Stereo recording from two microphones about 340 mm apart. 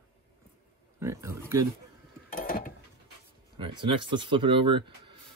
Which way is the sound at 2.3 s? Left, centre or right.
Left.